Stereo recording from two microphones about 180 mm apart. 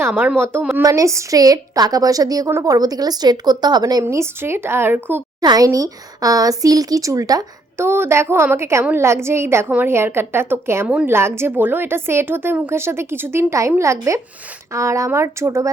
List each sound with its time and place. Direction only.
0.0 s a woman's voice: 10° right (ahead or behind)